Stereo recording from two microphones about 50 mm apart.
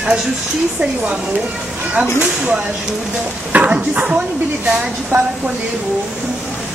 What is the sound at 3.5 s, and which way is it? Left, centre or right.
Speech, right.